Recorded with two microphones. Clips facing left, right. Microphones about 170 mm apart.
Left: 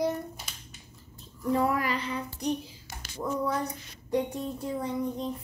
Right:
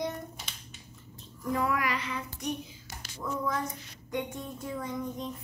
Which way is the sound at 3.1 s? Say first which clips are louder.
Left 3 dB; 35° left (ahead or behind).